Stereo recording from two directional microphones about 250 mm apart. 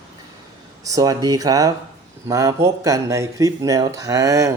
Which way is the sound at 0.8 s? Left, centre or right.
Centre.